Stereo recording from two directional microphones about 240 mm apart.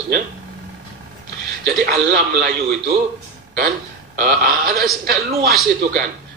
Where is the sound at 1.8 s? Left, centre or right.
Right.